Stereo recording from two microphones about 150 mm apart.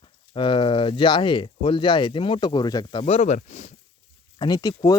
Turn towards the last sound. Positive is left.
turn(degrees=25)  # may be behind; listen again after turning